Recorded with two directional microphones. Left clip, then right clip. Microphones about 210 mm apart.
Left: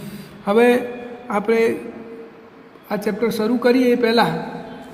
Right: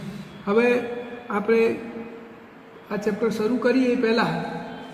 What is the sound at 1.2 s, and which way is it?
Speech, 45° left (ahead or behind).